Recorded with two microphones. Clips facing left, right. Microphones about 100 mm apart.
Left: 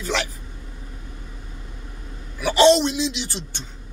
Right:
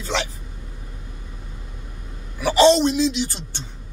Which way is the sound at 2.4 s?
35° right (ahead or behind).